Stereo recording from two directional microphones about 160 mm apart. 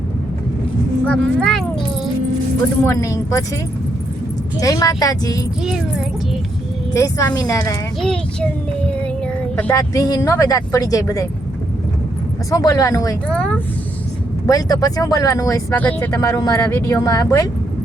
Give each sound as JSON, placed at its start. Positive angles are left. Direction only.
{"t": 1.0, "sound": "speech", "side_deg": 5}
{"t": 2.8, "sound": "speech", "side_deg": 20}
{"t": 4.6, "sound": "speech", "side_deg": 20}
{"t": 6.9, "sound": "speech", "side_deg": 20}
{"t": 8.0, "sound": "child singing", "side_deg": 5}
{"t": 9.7, "sound": "speech", "side_deg": 20}
{"t": 12.5, "sound": "speech", "side_deg": 20}
{"t": 13.2, "sound": "speech", "side_deg": 5}
{"t": 14.4, "sound": "speech", "side_deg": 20}
{"t": 15.7, "sound": "speech", "side_deg": 10}
{"t": 16.1, "sound": "speech", "side_deg": 20}